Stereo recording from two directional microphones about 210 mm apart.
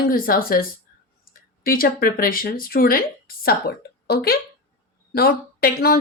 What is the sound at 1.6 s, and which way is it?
Speech, 45° left (ahead or behind).